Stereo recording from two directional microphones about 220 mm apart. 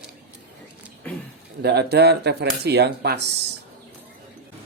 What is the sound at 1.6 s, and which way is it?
Speech, 50° right (ahead or behind).